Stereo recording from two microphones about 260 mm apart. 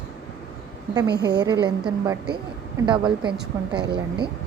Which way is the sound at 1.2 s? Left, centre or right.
Centre.